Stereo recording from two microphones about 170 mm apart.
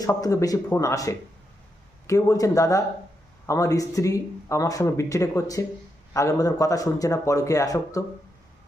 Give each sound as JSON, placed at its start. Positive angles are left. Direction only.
{"t": 0.0, "sound": "speech", "side_deg": 20}